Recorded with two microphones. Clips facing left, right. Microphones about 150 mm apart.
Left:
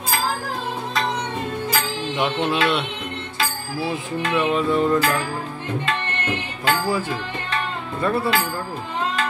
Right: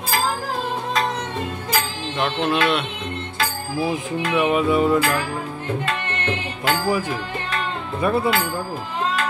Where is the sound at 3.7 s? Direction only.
20° right (ahead or behind).